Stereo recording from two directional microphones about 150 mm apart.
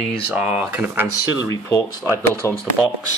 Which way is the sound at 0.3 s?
10° right (ahead or behind).